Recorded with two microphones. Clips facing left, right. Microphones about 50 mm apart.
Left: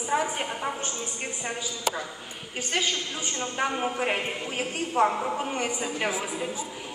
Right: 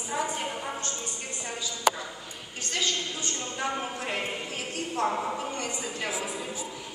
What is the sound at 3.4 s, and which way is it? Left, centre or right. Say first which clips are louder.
A woman's voice: left 5 dB; left.